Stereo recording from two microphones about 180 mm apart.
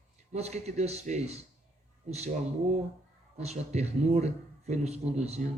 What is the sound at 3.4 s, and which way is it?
Speech, 40° right (ahead or behind).